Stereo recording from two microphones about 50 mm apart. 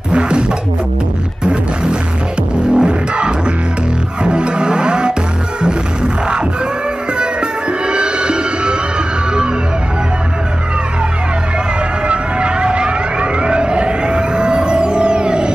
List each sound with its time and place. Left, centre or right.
0.1 s a sound: right
1.4 s music: centre
7.2 s music: centre
12.1 s vehicle: right